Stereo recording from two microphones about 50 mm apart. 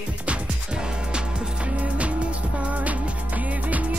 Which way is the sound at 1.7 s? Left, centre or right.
Right.